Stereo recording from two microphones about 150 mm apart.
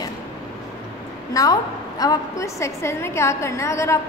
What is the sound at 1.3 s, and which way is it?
A woman's voice, 25° left (ahead or behind).